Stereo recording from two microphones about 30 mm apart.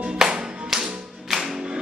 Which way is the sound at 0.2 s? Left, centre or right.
Right.